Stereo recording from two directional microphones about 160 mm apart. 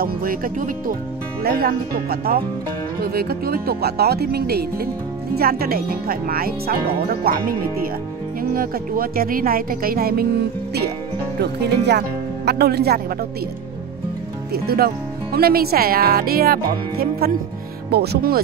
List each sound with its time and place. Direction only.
0.0 s speech: 60° right (ahead or behind)
1.4 s speech: 70° right (ahead or behind)
11.3 s speech: 90° right
12.4 s speech: 80° right
14.5 s speech: 75° right (ahead or behind)
17.9 s speech: 85° right